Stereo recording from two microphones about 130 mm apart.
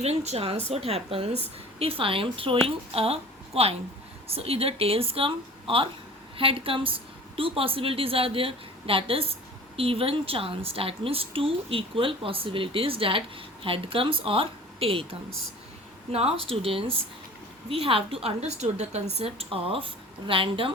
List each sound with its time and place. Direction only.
0.0 s a woman's voice: 55° right (ahead or behind)
16.1 s speech: 50° right (ahead or behind)